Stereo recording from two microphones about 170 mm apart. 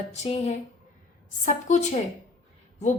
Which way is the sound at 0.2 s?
40° left (ahead or behind).